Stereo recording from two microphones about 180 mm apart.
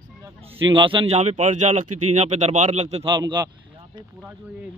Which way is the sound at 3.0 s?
25° right (ahead or behind).